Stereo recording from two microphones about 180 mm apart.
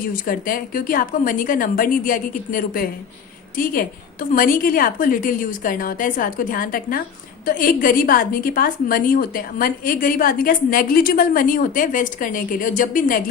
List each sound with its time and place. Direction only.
0.0 s a woman's voice: 50° left (ahead or behind)